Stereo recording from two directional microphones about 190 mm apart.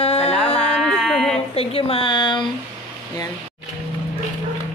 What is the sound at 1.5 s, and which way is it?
Speech, 30° left (ahead or behind).